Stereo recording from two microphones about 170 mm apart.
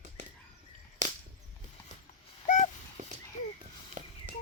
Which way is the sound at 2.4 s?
45° left (ahead or behind).